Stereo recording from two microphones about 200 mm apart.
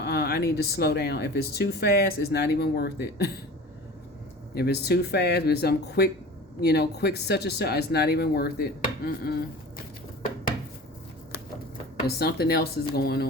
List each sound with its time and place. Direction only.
0.0 s speech: 55° left (ahead or behind)
4.5 s speech: 55° left (ahead or behind)
12.0 s speech: 50° left (ahead or behind)